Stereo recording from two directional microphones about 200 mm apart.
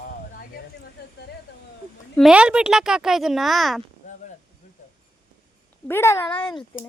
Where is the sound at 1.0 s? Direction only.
55° left (ahead or behind).